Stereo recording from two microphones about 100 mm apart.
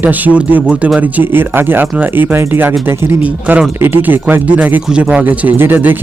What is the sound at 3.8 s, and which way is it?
Speech, 20° right (ahead or behind).